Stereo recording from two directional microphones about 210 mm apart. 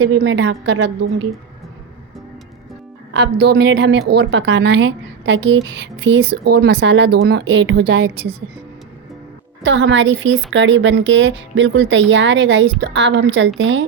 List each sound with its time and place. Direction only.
0.0 s speech: 55° right (ahead or behind)
3.1 s speech: 55° right (ahead or behind)
9.6 s speech: 60° right (ahead or behind)